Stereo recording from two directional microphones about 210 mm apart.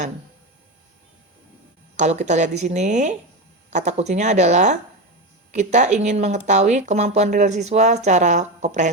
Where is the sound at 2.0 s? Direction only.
35° right (ahead or behind).